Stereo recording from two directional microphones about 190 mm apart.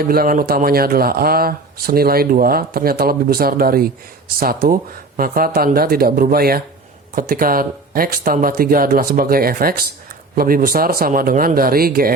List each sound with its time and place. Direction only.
0.0 s speech: 50° right (ahead or behind)